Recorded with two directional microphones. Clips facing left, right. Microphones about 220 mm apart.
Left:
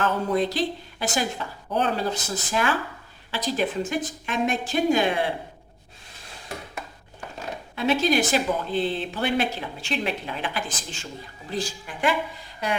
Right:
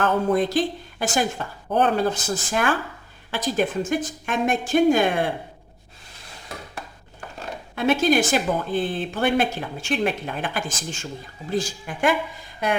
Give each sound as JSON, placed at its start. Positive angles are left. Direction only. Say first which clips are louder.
{"t": 0.0, "sound": "a woman's voice", "louder": "right 3 dB", "side_deg": -50}
{"t": 7.9, "sound": "speech", "louder": "right 2 dB", "side_deg": -50}